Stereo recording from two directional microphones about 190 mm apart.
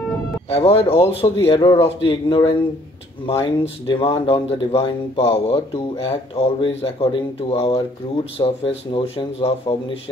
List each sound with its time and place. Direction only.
0.5 s speech: 30° left (ahead or behind)
1.3 s speech: 15° left (ahead or behind)